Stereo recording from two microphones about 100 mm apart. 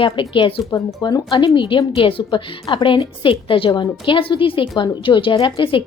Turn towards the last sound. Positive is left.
turn(degrees=60)  # may be behind; listen again after turning